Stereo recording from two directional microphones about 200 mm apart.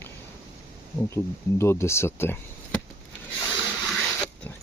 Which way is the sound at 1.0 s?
10° left (ahead or behind).